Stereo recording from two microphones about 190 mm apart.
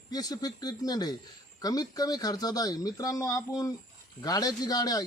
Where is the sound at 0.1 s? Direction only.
20° left (ahead or behind).